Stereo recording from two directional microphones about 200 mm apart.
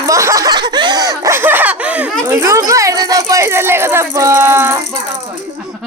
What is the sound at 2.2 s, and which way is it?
Speech, 15° right (ahead or behind).